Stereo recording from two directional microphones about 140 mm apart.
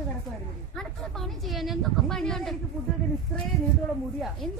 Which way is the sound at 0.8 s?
Centre (ahead or behind).